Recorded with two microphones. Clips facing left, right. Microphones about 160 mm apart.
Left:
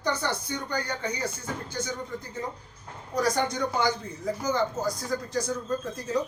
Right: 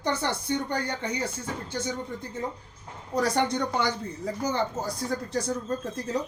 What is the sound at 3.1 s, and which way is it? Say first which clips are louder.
Speech: right 1 dB; 30° right (ahead or behind).